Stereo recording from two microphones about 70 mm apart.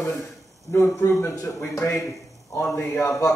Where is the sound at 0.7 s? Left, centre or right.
Left.